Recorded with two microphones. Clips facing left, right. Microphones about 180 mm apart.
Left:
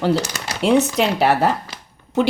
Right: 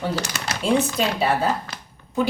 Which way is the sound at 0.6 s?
70° left (ahead or behind).